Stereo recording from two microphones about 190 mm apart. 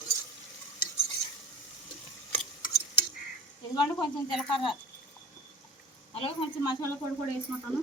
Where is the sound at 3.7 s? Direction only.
25° left (ahead or behind).